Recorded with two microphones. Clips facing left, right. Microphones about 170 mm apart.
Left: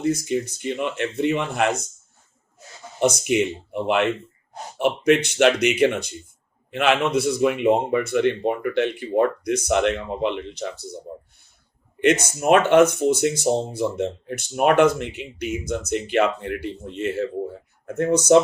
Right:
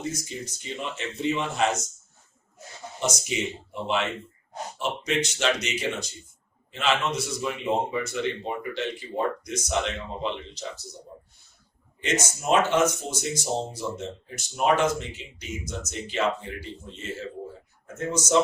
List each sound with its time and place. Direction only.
0.0 s speech: 60° left (ahead or behind)
3.0 s speech: 60° left (ahead or behind)
11.9 s speech: 60° left (ahead or behind)